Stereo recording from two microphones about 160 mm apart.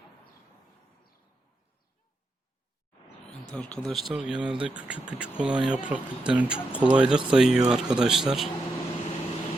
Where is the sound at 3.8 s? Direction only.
Centre (ahead or behind).